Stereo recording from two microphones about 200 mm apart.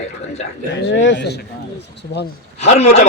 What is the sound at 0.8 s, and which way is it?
A man's voice, 65° left (ahead or behind).